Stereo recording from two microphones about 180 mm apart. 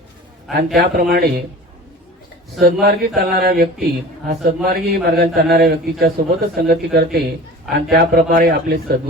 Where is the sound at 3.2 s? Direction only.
60° right (ahead or behind).